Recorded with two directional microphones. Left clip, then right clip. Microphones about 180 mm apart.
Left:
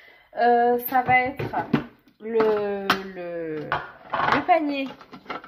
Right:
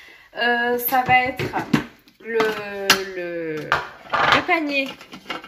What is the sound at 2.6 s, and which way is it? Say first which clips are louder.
Speech: right 5 dB; 50° left (ahead or behind).